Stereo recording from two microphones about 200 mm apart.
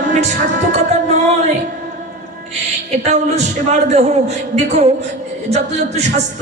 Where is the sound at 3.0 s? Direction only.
35° right (ahead or behind).